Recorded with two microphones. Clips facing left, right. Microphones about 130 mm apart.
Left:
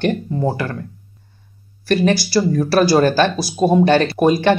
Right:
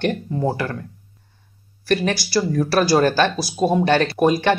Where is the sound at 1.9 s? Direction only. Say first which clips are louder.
Left 4 dB; centre (ahead or behind).